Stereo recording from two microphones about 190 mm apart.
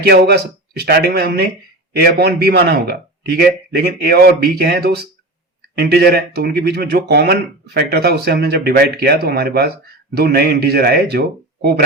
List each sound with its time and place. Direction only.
0.0 s speech: 55° right (ahead or behind)